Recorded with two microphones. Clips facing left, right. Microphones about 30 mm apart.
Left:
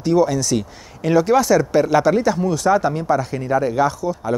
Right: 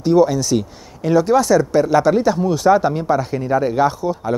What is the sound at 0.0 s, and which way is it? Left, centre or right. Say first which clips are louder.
Speech: right 3 dB; centre.